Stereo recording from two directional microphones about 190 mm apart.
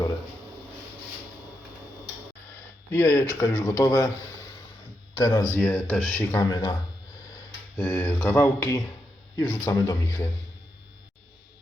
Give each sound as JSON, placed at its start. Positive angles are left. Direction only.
{"t": 2.9, "sound": "speech", "side_deg": 15}
{"t": 5.1, "sound": "speech", "side_deg": 20}
{"t": 5.5, "sound": "speech", "side_deg": 5}
{"t": 7.8, "sound": "speech", "side_deg": 10}